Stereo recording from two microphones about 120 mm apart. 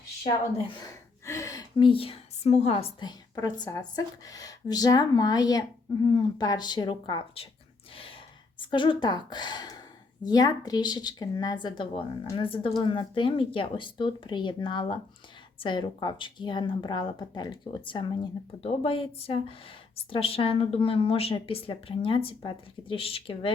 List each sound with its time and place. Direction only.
1.2 s a sound: 25° left (ahead or behind)
1.8 s speech: 50° left (ahead or behind)
3.0 s speech: 35° left (ahead or behind)
8.5 s a woman's voice: 45° left (ahead or behind)
18.6 s speech: 55° left (ahead or behind)